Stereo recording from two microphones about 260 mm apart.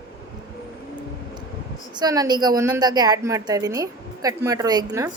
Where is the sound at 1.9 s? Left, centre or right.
Centre.